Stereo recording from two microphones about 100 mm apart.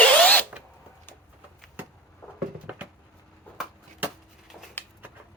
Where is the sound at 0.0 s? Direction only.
15° left (ahead or behind).